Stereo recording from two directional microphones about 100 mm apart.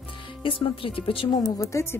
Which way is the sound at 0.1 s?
55° left (ahead or behind).